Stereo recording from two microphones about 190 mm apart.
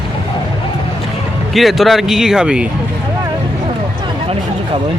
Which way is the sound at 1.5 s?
Centre (ahead or behind).